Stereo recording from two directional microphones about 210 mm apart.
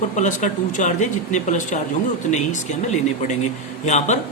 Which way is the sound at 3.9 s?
35° left (ahead or behind).